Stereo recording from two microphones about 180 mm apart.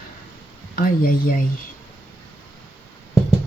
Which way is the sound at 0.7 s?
55° left (ahead or behind).